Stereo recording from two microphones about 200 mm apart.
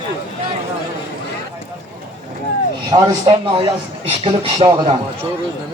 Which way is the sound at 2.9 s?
20° right (ahead or behind).